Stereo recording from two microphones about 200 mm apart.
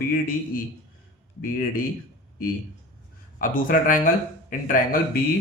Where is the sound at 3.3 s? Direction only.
45° left (ahead or behind).